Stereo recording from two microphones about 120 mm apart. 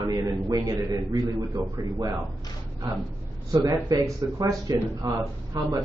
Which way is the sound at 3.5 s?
30° right (ahead or behind).